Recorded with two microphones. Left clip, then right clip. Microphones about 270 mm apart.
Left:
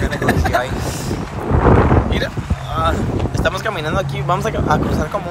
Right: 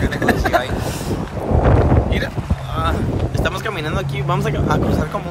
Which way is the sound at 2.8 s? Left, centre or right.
Centre.